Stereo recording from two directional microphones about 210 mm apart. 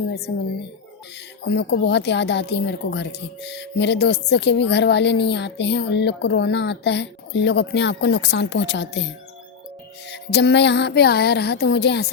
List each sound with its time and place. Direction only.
1.5 s speech: 55° left (ahead or behind)
10.1 s music: 55° left (ahead or behind)